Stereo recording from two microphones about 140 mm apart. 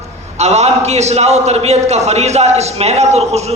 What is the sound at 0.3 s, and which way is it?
A man's voice, 50° right (ahead or behind).